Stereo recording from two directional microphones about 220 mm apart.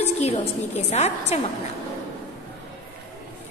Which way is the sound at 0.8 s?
30° left (ahead or behind).